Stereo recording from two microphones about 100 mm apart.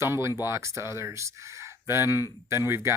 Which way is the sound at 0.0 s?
25° right (ahead or behind).